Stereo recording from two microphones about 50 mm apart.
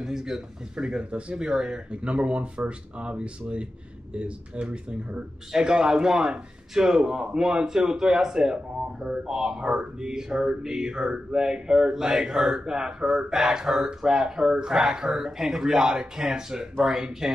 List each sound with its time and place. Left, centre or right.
0.0 s speech: centre